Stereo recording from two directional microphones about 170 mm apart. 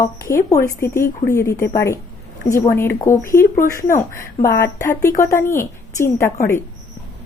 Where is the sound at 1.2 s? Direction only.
15° left (ahead or behind).